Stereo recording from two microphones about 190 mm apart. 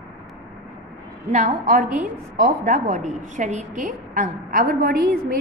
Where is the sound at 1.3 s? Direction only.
40° right (ahead or behind).